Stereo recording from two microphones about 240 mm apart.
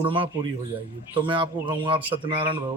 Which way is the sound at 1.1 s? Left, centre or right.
Right.